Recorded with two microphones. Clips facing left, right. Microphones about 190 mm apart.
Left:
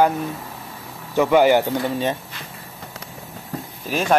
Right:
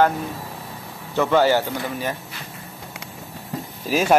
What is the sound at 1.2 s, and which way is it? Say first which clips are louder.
Speech: left 3 dB; 15° left (ahead or behind).